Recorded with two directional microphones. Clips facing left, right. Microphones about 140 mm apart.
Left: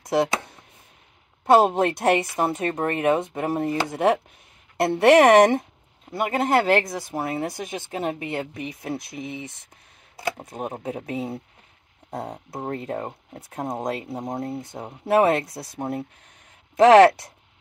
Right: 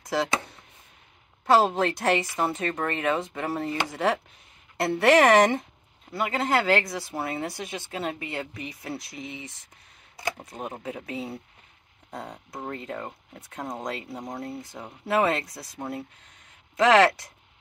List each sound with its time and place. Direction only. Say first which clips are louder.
0.0 s speech: left 5 dB; 20° left (ahead or behind)
1.4 s speech: left 4 dB; 25° left (ahead or behind)
9.2 s speech: left 5 dB; 55° left (ahead or behind)
10.1 s speech: left 4 dB; 25° left (ahead or behind)
12.1 s speech: left 6 dB; 35° left (ahead or behind)
14.2 s speech: left 5 dB; 25° left (ahead or behind)